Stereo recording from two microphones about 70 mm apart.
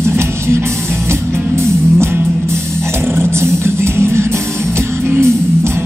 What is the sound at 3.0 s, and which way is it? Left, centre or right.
Music, right.